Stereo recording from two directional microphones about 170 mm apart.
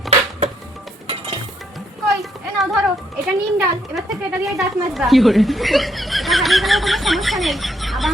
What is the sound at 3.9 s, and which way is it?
Speech, centre (ahead or behind).